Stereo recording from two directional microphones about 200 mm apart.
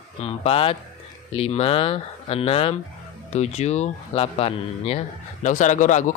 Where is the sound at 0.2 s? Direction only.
30° left (ahead or behind).